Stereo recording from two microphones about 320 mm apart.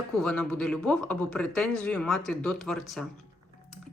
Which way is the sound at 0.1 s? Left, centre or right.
Centre.